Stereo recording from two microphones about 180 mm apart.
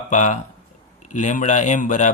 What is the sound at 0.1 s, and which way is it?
Speech, 45° left (ahead or behind).